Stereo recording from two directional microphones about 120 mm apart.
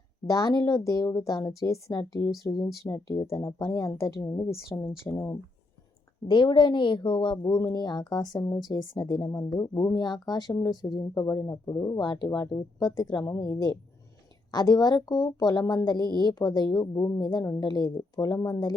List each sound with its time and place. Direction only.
0.3 s speech: 30° left (ahead or behind)
2.8 s speech: 30° left (ahead or behind)
6.2 s speech: 40° left (ahead or behind)